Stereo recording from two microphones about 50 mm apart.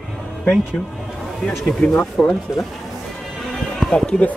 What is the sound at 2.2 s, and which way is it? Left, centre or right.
Speech, centre.